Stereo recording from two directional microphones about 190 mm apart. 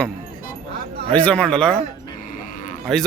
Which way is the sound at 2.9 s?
Centre (ahead or behind).